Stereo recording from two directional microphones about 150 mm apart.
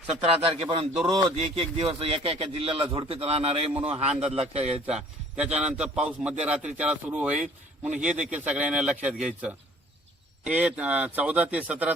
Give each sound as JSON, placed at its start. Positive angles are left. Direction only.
{"t": 0.4, "sound": "speech", "side_deg": -40}
{"t": 4.9, "sound": "a man's voice", "side_deg": -5}